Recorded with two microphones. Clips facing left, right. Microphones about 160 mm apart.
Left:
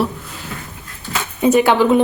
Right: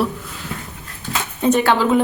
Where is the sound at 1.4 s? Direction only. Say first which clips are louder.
Left 3 dB; 15° left (ahead or behind).